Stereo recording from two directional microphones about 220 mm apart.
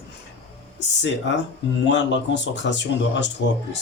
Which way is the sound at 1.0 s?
55° left (ahead or behind).